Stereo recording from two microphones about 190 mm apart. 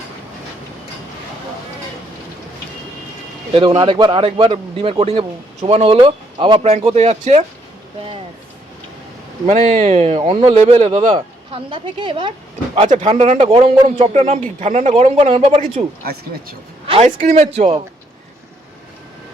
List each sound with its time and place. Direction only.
3.5 s speech: 25° right (ahead or behind)
9.5 s speech: 35° right (ahead or behind)
16.8 s a sound: 30° right (ahead or behind)
17.2 s speech: 40° right (ahead or behind)